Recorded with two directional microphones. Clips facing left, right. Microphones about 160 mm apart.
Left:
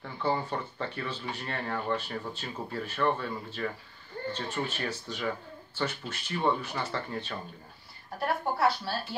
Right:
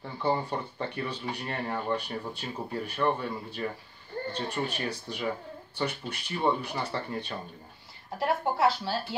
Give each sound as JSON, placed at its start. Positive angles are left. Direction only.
{"t": 0.0, "sound": "speech", "side_deg": -15}
{"t": 8.2, "sound": "speech", "side_deg": -25}